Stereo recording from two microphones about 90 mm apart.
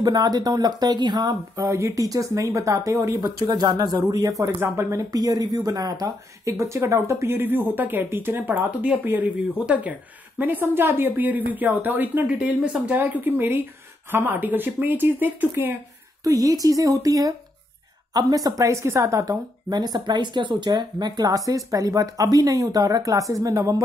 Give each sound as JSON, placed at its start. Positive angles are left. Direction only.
{"t": 0.0, "sound": "speech", "side_deg": -50}
{"t": 4.6, "sound": "speech", "side_deg": -25}
{"t": 5.1, "sound": "speech", "side_deg": -45}
{"t": 16.3, "sound": "speech", "side_deg": -45}
{"t": 19.7, "sound": "speech", "side_deg": -50}